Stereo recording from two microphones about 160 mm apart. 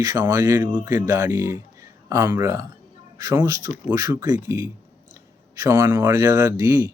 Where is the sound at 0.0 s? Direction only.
20° right (ahead or behind).